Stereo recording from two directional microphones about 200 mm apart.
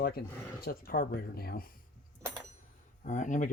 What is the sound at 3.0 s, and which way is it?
Speech, 40° left (ahead or behind).